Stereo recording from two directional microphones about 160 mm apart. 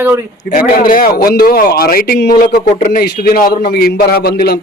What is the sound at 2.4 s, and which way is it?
A man's voice, 60° left (ahead or behind).